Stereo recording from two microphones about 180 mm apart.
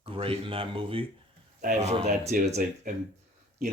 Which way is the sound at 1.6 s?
40° right (ahead or behind).